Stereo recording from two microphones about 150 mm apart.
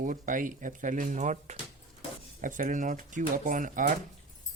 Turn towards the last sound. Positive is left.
turn(degrees=-60)  # may be behind; listen again after turning